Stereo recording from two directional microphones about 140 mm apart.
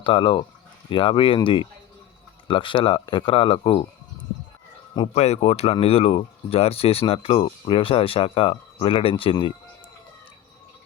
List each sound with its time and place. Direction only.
0.0 s speech: 35° left (ahead or behind)
2.5 s speech: 35° left (ahead or behind)
5.1 s speech: 50° left (ahead or behind)